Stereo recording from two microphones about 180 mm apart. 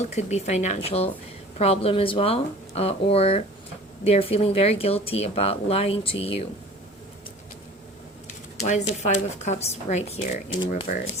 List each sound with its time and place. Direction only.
0.0 s speech: 40° left (ahead or behind)
8.5 s speech: 40° left (ahead or behind)